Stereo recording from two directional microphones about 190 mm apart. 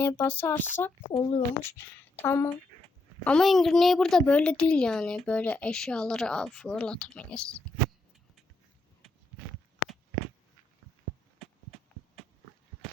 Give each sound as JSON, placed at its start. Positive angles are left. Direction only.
{"t": 0.0, "sound": "speech", "side_deg": 10}
{"t": 1.1, "sound": "speech", "side_deg": 25}
{"t": 1.6, "sound": "a woman's voice", "side_deg": 10}